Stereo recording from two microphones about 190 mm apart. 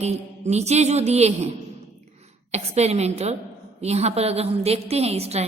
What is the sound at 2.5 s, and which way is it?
A woman's voice, 35° right (ahead or behind).